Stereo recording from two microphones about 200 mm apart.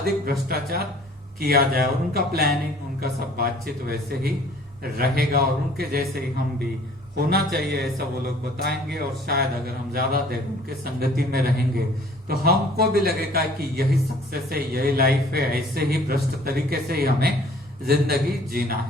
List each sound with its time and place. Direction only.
0.0 s a man's voice: 50° right (ahead or behind)